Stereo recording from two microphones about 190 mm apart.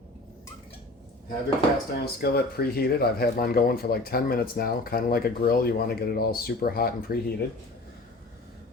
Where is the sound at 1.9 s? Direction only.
55° left (ahead or behind).